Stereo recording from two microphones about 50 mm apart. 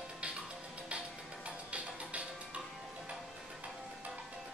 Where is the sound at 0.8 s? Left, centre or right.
Right.